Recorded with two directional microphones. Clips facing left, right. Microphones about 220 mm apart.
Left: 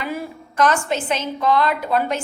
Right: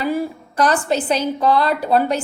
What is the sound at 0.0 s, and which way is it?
A woman's voice, 35° right (ahead or behind).